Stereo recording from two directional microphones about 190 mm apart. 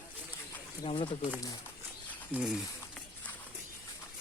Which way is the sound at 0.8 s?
25° left (ahead or behind).